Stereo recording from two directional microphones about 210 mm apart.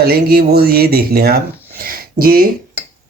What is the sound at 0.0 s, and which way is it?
Speech, 45° right (ahead or behind).